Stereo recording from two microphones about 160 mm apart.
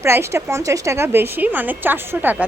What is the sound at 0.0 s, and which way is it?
A woman's voice, 15° right (ahead or behind).